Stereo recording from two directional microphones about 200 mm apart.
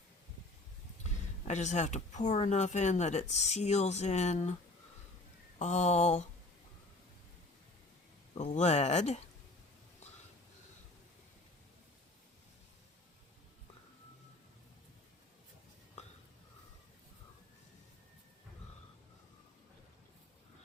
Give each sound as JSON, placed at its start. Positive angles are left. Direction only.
{"t": 1.5, "sound": "speech", "side_deg": 35}
{"t": 5.5, "sound": "speech", "side_deg": 35}
{"t": 8.4, "sound": "speech", "side_deg": 35}
{"t": 16.0, "sound": "a sound", "side_deg": 35}